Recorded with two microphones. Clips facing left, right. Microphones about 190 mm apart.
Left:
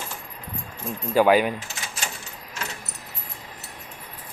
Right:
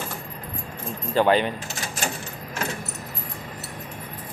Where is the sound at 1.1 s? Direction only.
10° left (ahead or behind).